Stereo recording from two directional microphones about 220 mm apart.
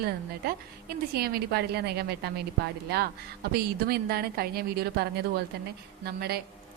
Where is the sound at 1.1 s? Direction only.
45° right (ahead or behind).